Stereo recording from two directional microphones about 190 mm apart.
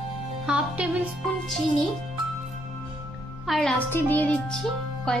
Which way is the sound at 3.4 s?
Centre (ahead or behind).